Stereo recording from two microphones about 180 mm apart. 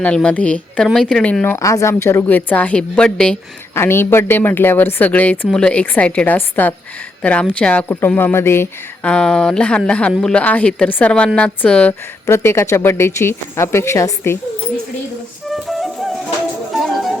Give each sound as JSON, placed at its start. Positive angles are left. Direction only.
{"t": 0.0, "sound": "speech", "side_deg": 5}
{"t": 15.4, "sound": "music", "side_deg": 0}